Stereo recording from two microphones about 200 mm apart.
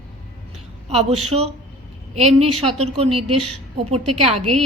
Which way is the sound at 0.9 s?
30° right (ahead or behind).